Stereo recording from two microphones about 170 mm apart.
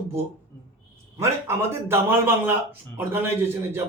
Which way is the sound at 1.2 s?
15° right (ahead or behind).